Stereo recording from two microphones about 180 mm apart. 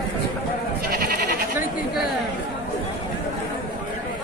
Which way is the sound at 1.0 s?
60° right (ahead or behind).